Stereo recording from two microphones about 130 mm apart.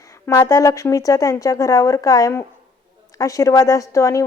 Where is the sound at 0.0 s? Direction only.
25° left (ahead or behind).